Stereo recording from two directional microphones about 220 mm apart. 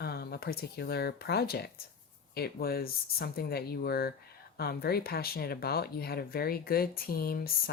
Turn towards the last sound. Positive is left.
turn(degrees=45)  # may be behind; listen again after turning